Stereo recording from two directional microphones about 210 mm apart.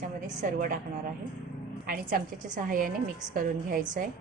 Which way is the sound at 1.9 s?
40° right (ahead or behind).